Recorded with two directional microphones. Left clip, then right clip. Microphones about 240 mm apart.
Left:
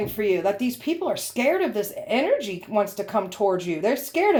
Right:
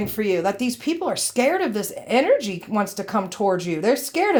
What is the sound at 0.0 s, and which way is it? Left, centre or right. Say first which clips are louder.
Speech: right 1 dB; right.